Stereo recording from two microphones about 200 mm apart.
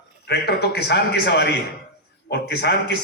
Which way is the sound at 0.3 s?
55° left (ahead or behind).